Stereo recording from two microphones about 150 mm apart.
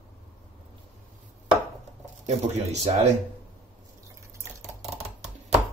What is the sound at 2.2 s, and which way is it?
Speech, 50° right (ahead or behind).